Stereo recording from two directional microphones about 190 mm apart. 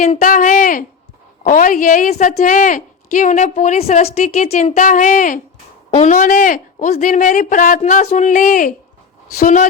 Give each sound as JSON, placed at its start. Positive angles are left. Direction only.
{"t": 0.2, "sound": "a woman's voice", "side_deg": 45}